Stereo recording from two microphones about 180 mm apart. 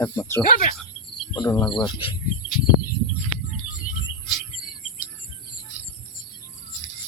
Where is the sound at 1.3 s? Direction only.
20° left (ahead or behind).